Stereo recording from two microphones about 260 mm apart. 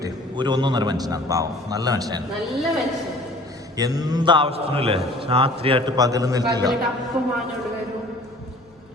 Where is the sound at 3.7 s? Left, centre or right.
Centre.